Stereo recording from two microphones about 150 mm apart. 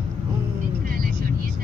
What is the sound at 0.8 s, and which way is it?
Speech, 70° right (ahead or behind).